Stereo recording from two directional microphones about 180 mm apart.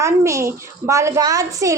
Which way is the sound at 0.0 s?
15° right (ahead or behind).